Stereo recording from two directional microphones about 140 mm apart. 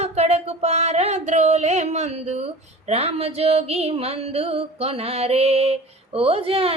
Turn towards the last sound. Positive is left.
turn(degrees=-40)  # may be behind; listen again after turning